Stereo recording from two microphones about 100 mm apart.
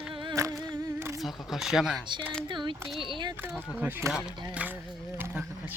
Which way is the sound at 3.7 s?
15° right (ahead or behind).